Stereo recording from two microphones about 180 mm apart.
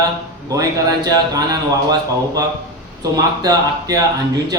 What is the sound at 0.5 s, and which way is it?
A man's voice, 20° right (ahead or behind).